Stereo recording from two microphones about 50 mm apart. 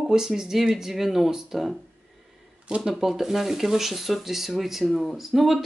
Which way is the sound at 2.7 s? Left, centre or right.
Right.